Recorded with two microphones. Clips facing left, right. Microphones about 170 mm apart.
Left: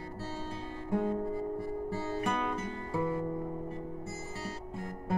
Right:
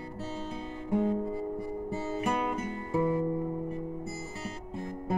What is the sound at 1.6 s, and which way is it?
Music, 15° right (ahead or behind).